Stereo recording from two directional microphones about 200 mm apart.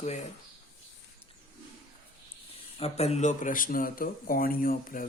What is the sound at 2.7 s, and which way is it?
Speech, 30° left (ahead or behind).